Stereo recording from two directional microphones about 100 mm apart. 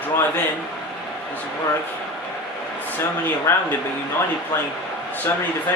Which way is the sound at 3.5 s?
30° left (ahead or behind).